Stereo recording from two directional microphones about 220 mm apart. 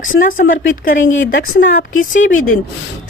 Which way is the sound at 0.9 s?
60° left (ahead or behind).